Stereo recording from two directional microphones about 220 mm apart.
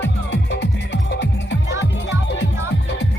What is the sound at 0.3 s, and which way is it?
Music, 50° left (ahead or behind).